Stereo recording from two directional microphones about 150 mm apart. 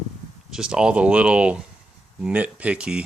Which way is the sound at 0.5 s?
5° right (ahead or behind).